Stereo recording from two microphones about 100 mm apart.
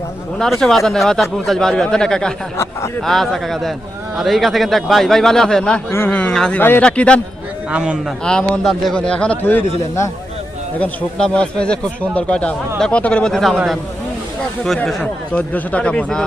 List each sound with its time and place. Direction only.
0.3 s speech: 5° left (ahead or behind)
6.6 s speech: 20° left (ahead or behind)
7.7 s a man's voice: 10° right (ahead or behind)
8.2 s speech: 10° left (ahead or behind)
10.8 s speech: 10° left (ahead or behind)
15.3 s speech: 15° left (ahead or behind)